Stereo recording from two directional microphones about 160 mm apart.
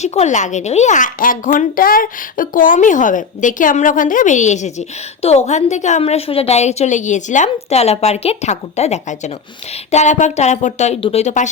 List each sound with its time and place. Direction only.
0.0 s speech: 45° left (ahead or behind)